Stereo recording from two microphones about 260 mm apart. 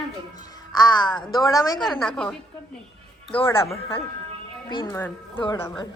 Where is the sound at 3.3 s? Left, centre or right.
Centre.